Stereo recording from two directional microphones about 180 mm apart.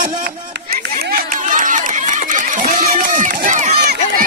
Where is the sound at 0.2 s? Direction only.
55° right (ahead or behind).